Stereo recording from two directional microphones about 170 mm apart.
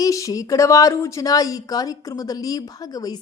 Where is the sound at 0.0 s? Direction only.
20° left (ahead or behind).